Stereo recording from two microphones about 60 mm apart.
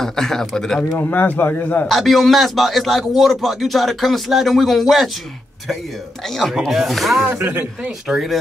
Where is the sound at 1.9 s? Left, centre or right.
Centre.